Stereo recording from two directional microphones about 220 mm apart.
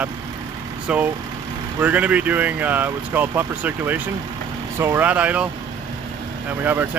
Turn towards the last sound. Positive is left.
turn(degrees=-10)  # may be behind; listen again after turning